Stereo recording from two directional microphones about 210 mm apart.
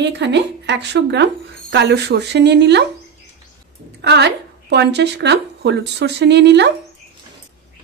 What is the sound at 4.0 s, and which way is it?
A woman's voice, 55° right (ahead or behind).